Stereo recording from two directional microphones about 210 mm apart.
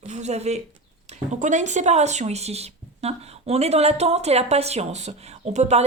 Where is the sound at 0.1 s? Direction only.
30° right (ahead or behind).